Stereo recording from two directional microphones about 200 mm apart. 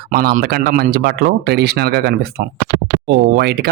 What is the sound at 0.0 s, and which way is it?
Speech, 50° right (ahead or behind).